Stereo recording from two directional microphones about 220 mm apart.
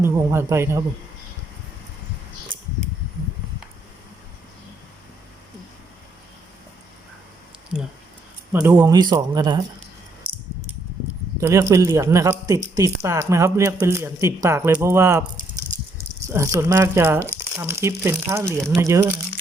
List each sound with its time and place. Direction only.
0.0 s speech: 10° right (ahead or behind)
8.6 s speech: 15° right (ahead or behind)
11.3 s speech: 10° right (ahead or behind)
16.2 s speech: 15° right (ahead or behind)